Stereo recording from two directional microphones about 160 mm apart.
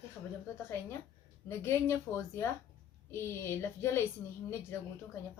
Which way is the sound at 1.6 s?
15° left (ahead or behind).